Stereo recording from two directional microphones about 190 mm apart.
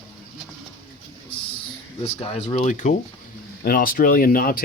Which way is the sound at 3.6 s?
50° left (ahead or behind).